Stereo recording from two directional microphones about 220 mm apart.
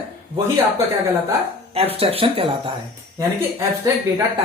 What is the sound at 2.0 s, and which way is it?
Speech, 25° right (ahead or behind).